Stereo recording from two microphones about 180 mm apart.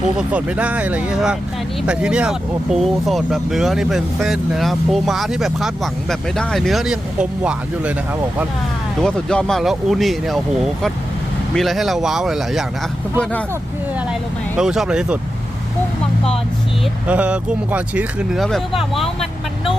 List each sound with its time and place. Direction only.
0.2 s speech: 5° right (ahead or behind)
9.0 s speech: 5° left (ahead or behind)
14.6 s speech: 5° right (ahead or behind)
17.1 s speech: 5° right (ahead or behind)